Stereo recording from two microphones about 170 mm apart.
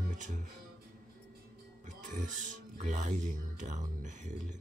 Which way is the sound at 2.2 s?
45° right (ahead or behind).